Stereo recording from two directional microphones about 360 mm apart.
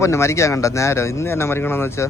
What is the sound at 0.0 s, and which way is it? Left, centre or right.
A man's voice, centre.